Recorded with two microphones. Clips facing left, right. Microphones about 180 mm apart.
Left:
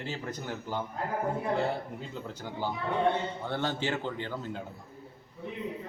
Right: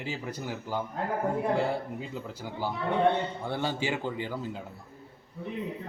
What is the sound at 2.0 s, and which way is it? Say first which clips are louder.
A man's voice: right 2 dB; 5° right (ahead or behind).